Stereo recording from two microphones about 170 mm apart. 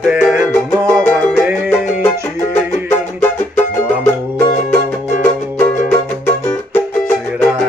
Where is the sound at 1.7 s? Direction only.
15° left (ahead or behind).